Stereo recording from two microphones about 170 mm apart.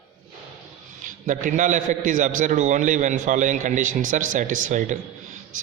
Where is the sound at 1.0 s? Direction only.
50° right (ahead or behind).